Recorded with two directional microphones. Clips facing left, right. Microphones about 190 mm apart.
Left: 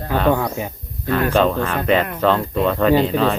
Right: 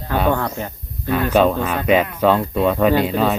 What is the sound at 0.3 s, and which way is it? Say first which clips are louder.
Speech: left 1 dB; 10° left (ahead or behind).